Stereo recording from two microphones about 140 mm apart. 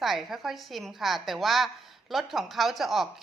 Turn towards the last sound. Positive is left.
turn(degrees=0)  # may be behind; listen again after turning